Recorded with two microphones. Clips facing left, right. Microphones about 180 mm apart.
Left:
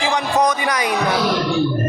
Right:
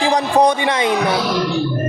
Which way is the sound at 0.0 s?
30° right (ahead or behind).